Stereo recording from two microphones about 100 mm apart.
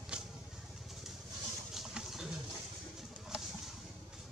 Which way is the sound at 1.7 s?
5° right (ahead or behind).